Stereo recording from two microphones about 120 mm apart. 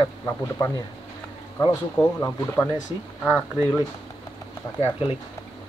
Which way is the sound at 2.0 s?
35° left (ahead or behind).